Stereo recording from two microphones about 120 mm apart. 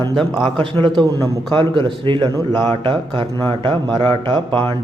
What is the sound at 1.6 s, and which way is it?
Speech, 40° right (ahead or behind).